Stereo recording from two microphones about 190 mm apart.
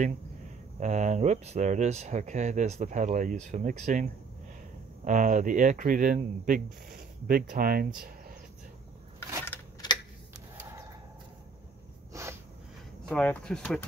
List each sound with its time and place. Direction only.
0.7 s speech: 40° right (ahead or behind)
12.1 s snort: 15° right (ahead or behind)
13.1 s speech: 5° left (ahead or behind)